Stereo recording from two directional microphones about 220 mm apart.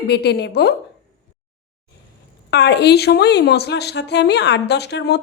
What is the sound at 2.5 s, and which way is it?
Speech, 50° left (ahead or behind).